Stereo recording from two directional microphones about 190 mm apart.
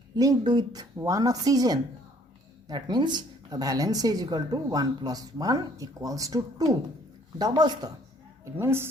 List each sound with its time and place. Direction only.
0.2 s a woman's voice: 20° right (ahead or behind)